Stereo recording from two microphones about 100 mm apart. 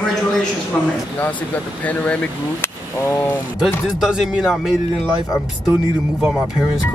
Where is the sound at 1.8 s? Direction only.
15° left (ahead or behind).